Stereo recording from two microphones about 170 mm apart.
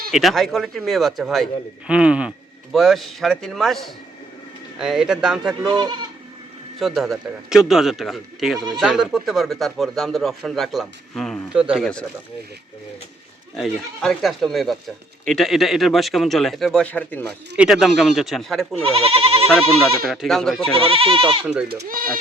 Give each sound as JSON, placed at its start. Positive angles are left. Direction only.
{"t": 0.1, "sound": "speech", "side_deg": 0}
{"t": 5.6, "sound": "speech", "side_deg": -25}
{"t": 6.7, "sound": "speech", "side_deg": 0}
{"t": 13.6, "sound": "speech", "side_deg": 0}
{"t": 17.6, "sound": "speech", "side_deg": 0}
{"t": 18.8, "sound": "speech", "side_deg": -35}
{"t": 20.1, "sound": "speech", "side_deg": 0}
{"t": 20.7, "sound": "speech", "side_deg": -35}
{"t": 21.4, "sound": "speech", "side_deg": -5}
{"t": 21.8, "sound": "speech", "side_deg": -55}